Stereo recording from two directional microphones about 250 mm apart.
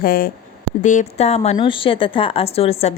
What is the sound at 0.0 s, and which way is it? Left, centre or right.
A woman's voice, left.